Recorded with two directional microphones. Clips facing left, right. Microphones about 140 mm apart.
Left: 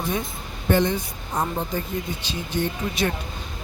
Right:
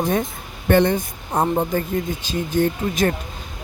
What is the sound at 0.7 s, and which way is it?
Speech, 55° right (ahead or behind).